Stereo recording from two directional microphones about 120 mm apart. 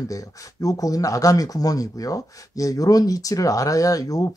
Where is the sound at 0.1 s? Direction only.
30° left (ahead or behind).